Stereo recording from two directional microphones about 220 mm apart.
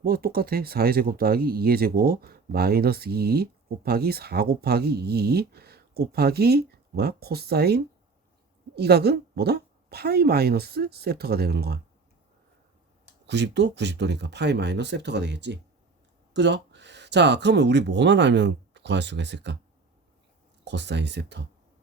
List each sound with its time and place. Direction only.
0.0 s speech: 40° right (ahead or behind)
13.2 s speech: 50° right (ahead or behind)
20.7 s speech: 50° right (ahead or behind)